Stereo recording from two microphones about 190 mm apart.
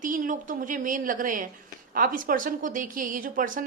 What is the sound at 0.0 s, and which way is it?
A woman's voice, 45° right (ahead or behind).